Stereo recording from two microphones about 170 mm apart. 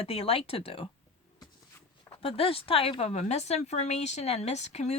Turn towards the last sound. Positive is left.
turn(degrees=40)  # may be behind; listen again after turning